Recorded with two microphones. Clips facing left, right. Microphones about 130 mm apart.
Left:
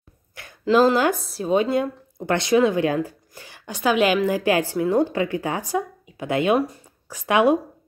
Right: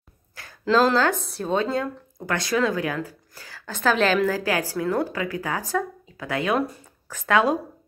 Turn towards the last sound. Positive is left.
turn(degrees=15)  # may be behind; listen again after turning